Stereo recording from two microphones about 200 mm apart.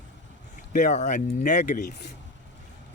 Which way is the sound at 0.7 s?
40° left (ahead or behind).